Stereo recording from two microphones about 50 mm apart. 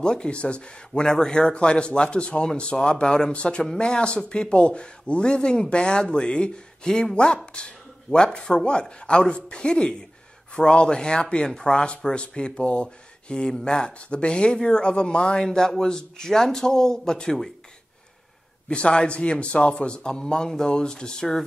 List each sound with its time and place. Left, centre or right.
0.0 s speech: centre
18.7 s speech: left